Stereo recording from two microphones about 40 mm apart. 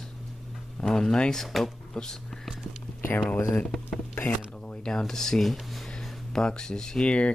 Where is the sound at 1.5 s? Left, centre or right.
Centre.